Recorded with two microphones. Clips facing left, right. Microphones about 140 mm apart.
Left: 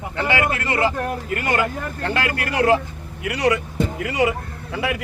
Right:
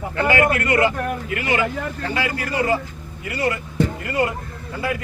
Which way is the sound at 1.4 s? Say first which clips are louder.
Even; 45° left (ahead or behind).